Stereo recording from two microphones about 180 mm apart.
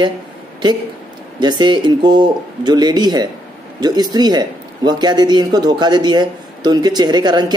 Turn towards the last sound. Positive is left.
turn(degrees=-25)  # may be behind; listen again after turning